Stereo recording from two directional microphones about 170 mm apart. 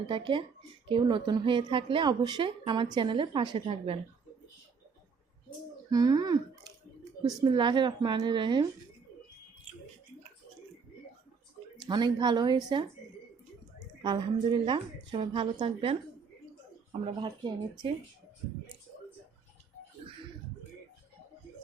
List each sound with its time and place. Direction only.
0.1 s a woman's voice: 30° right (ahead or behind)
5.9 s a woman's voice: 20° right (ahead or behind)
11.9 s a woman's voice: 25° right (ahead or behind)
14.0 s a woman's voice: 30° right (ahead or behind)
17.1 s a woman's voice: 25° right (ahead or behind)